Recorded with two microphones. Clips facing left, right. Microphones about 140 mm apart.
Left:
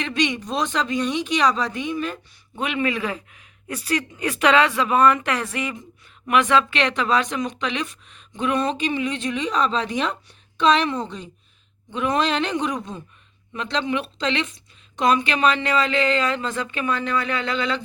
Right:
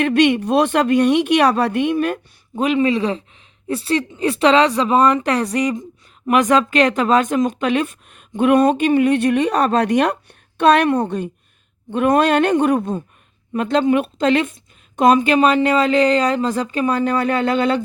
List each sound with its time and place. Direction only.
0.0 s a woman's voice: 60° right (ahead or behind)
2.6 s speech: 35° right (ahead or behind); by 17.8 s 50° right (ahead or behind)